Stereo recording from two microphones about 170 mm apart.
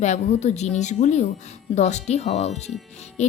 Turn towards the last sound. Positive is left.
turn(degrees=40)  # may be behind; listen again after turning